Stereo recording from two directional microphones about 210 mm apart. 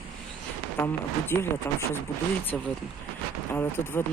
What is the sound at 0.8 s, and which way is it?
Speech, 10° left (ahead or behind).